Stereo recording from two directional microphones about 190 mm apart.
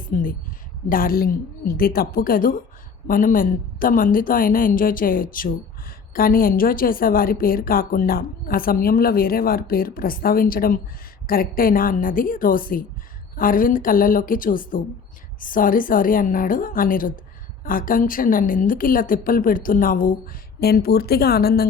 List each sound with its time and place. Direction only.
0.1 s a woman's voice: 45° left (ahead or behind)